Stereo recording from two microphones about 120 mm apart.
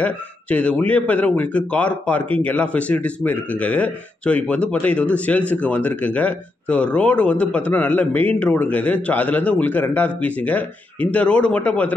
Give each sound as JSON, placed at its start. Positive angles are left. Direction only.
{"t": 0.0, "sound": "speech", "side_deg": 10}